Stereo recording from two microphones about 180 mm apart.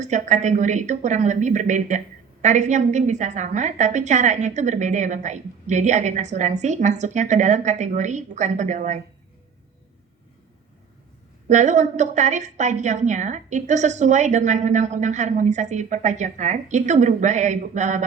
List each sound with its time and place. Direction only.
0.0 s a woman's voice: 40° right (ahead or behind)
11.4 s a woman's voice: 40° right (ahead or behind)